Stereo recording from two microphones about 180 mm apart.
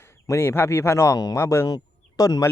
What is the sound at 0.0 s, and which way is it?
Speech, 15° left (ahead or behind).